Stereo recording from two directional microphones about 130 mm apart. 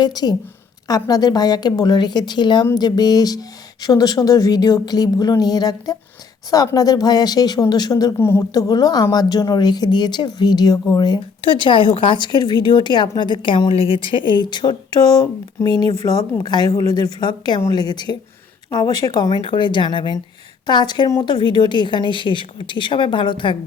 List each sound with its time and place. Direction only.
0.0 s speech: 30° left (ahead or behind)
8.2 s speech: 20° left (ahead or behind); by 23.6 s 40° left (ahead or behind)